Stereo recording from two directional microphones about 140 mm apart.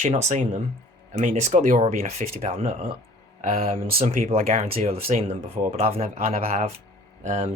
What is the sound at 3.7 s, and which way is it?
Speech, 90° right.